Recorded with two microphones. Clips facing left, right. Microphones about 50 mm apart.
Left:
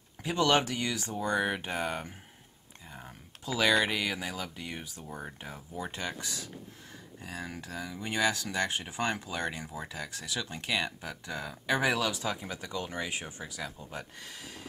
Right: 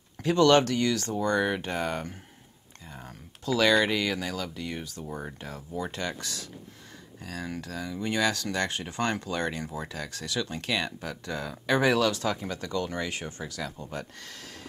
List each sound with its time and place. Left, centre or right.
0.2 s speech: centre
5.0 s speech: centre
5.4 s speech: centre